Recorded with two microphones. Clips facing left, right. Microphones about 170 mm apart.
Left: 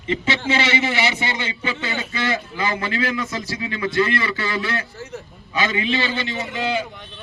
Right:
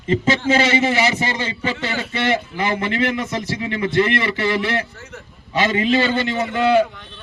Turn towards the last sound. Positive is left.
turn(degrees=-55)  # may be behind; listen again after turning